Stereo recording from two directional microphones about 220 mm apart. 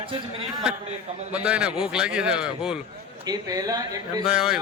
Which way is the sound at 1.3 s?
5° right (ahead or behind).